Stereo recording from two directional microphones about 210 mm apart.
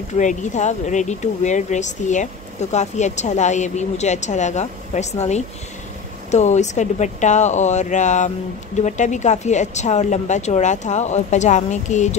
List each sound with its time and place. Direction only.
0.1 s speech: 35° left (ahead or behind)